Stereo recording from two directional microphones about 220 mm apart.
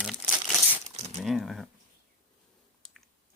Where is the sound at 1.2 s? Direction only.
Centre (ahead or behind).